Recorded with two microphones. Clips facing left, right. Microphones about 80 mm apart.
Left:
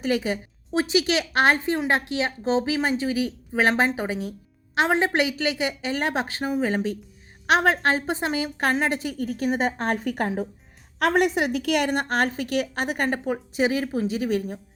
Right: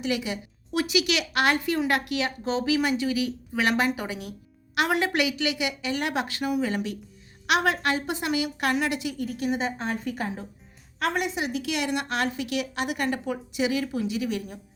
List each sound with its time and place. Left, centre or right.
0.0 s a woman's voice: left